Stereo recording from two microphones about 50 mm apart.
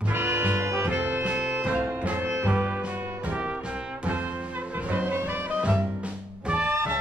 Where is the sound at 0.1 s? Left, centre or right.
Right.